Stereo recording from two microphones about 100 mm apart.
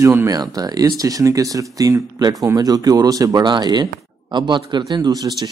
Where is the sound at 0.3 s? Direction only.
40° right (ahead or behind).